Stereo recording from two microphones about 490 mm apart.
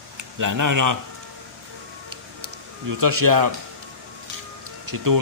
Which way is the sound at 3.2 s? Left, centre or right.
Right.